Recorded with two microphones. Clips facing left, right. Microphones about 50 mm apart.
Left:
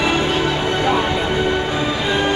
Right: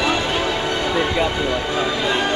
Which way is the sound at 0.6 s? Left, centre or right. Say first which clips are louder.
Left 3 dB; left.